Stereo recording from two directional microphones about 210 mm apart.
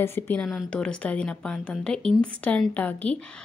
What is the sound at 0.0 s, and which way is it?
A woman's voice, 10° left (ahead or behind).